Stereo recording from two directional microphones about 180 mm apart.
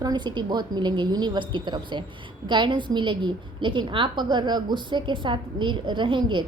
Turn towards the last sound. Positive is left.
turn(degrees=-25)  # may be behind; listen again after turning